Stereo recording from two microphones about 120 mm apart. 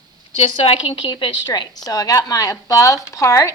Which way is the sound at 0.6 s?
45° left (ahead or behind).